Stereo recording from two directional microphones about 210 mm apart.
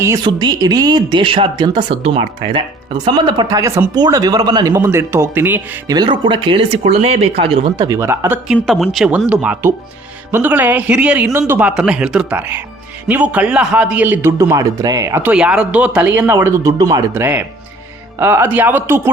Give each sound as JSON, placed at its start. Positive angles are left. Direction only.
{"t": 0.0, "sound": "speech", "side_deg": -15}
{"t": 8.5, "sound": "a man's voice", "side_deg": 0}